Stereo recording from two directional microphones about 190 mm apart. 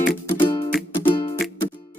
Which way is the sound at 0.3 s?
25° left (ahead or behind).